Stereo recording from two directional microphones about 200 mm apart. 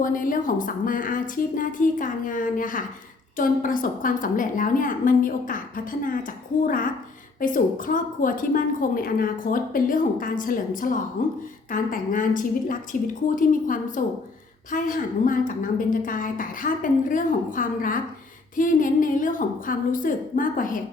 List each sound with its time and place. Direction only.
0.0 s a woman's voice: 45° left (ahead or behind)